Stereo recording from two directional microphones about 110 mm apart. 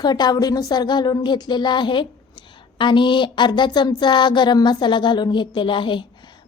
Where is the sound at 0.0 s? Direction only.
40° left (ahead or behind).